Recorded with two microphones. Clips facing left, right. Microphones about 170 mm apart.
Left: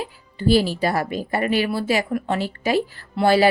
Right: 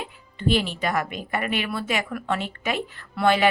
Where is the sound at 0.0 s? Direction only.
35° left (ahead or behind).